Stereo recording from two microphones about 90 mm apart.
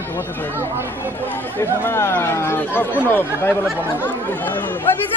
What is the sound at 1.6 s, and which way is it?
Speech, 30° left (ahead or behind).